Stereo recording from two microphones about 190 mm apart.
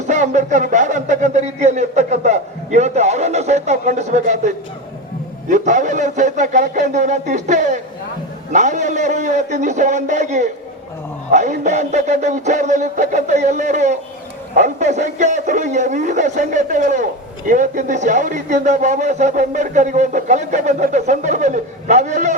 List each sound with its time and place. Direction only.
0.1 s a man's voice: 40° right (ahead or behind)